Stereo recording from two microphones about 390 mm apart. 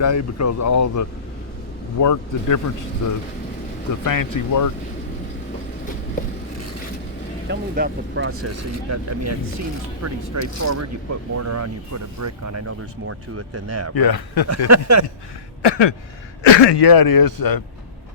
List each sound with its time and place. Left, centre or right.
0.0 s speech: left
4.0 s speech: left
7.4 s speech: right
13.9 s a man's voice: left
14.7 s a sound: right
15.6 s a sound: left
16.5 s speech: left